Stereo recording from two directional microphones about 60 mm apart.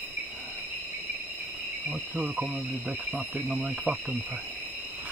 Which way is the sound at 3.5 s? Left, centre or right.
Right.